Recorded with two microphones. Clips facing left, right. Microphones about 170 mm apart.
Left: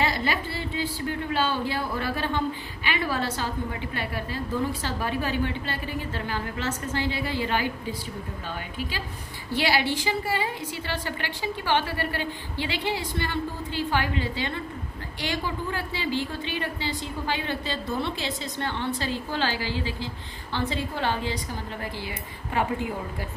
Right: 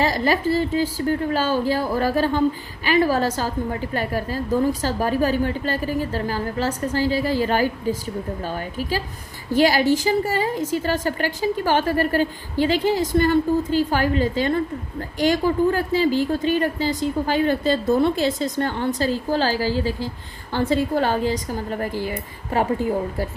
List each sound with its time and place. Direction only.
0.0 s a woman's voice: 40° right (ahead or behind)
9.5 s a woman's voice: 45° right (ahead or behind)